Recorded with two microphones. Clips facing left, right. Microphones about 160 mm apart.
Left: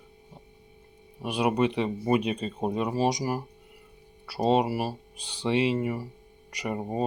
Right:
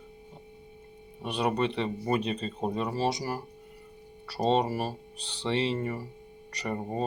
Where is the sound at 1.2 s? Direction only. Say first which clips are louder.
Left 3 dB; 10° left (ahead or behind).